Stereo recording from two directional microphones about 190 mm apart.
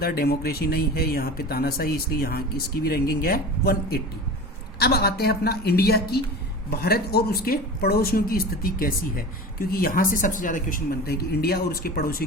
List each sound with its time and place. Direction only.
0.0 s a woman's voice: 55° left (ahead or behind)